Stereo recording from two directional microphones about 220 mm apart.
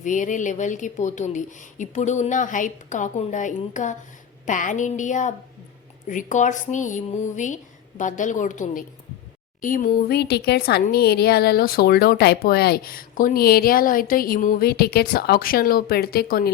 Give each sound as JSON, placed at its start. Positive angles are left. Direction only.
{"t": 0.0, "sound": "speech", "side_deg": 35}